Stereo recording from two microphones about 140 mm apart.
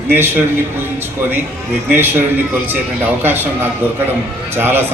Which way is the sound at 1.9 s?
15° right (ahead or behind).